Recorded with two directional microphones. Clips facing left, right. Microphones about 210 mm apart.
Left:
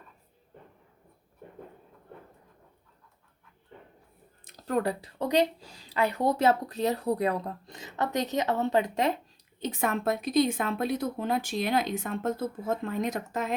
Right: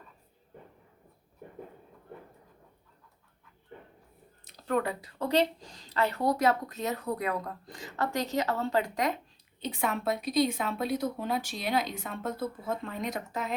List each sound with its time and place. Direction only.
4.4 s a sound: 40° left (ahead or behind)
5.2 s a woman's voice: 15° left (ahead or behind)
6.3 s a woman's voice: 30° left (ahead or behind)
9.6 s a woman's voice: 50° left (ahead or behind)